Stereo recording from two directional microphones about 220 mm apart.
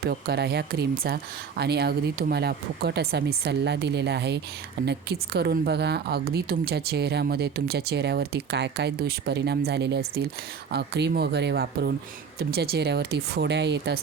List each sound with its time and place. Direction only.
0.0 s a woman's voice: 45° right (ahead or behind)